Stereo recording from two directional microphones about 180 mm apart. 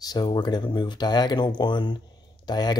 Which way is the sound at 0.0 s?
20° left (ahead or behind).